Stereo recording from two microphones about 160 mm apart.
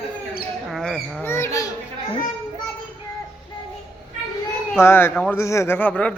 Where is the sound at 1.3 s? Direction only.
20° left (ahead or behind).